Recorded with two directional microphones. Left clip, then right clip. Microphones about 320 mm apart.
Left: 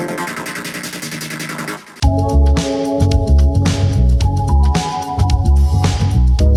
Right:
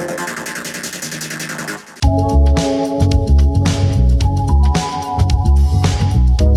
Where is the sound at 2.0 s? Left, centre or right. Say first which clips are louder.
Right 1 dB; centre.